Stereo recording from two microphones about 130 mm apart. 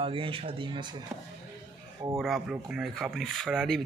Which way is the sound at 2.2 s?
5° right (ahead or behind).